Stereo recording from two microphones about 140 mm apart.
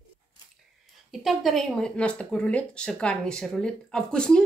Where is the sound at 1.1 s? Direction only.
Centre (ahead or behind).